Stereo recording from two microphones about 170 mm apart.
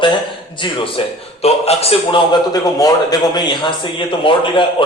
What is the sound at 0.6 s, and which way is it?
A man's voice, 30° left (ahead or behind).